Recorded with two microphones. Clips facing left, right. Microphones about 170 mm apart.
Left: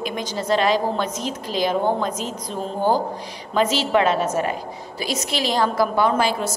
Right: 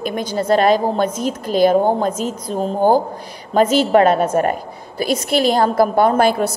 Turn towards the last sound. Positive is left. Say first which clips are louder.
# right 6 dB
turn(degrees=-55)  # may be behind; listen again after turning